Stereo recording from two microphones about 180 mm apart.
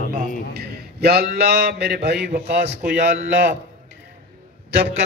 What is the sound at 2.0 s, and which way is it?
Speech, 65° right (ahead or behind).